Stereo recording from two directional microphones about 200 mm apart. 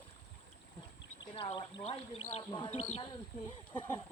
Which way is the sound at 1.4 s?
30° left (ahead or behind).